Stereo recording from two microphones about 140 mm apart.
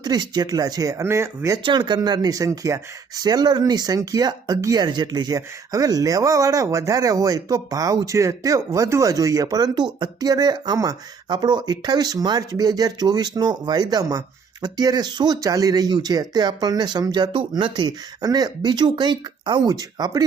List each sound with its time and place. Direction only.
0.0 s speech: 30° right (ahead or behind)
1.6 s speech: 30° right (ahead or behind)